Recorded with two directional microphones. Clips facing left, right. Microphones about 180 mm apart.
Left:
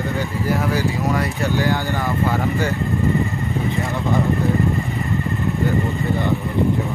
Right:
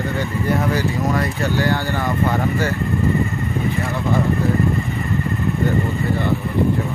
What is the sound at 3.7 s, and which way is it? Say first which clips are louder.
Vehicle: even; 15° left (ahead or behind).